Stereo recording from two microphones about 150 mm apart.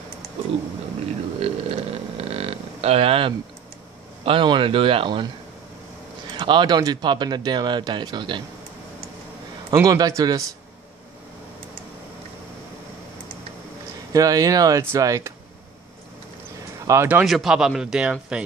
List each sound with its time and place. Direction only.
1.4 s a sound: 40° right (ahead or behind)
4.2 s speech: 35° right (ahead or behind)
6.3 s speech: 30° right (ahead or behind)
9.8 s speech: 25° right (ahead or behind)
14.1 s speech: 25° right (ahead or behind)
16.8 s speech: 20° right (ahead or behind)
17.2 s speech: centre (ahead or behind)